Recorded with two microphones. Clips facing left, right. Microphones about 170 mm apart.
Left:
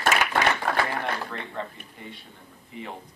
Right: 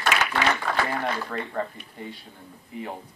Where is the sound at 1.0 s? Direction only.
45° right (ahead or behind).